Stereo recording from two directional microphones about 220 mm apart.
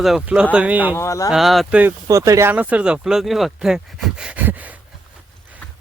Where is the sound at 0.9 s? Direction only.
15° left (ahead or behind).